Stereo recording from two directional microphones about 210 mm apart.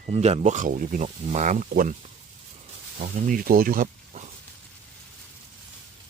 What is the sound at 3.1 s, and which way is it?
Speech, 40° right (ahead or behind).